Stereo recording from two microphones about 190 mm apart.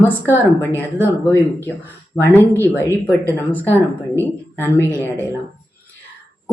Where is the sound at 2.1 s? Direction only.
10° left (ahead or behind).